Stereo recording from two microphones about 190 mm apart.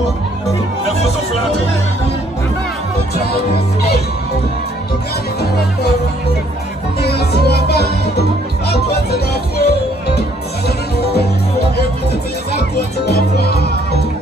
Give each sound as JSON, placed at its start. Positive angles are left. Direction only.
{"t": 7.0, "sound": "music", "side_deg": 55}
{"t": 12.5, "sound": "music", "side_deg": 55}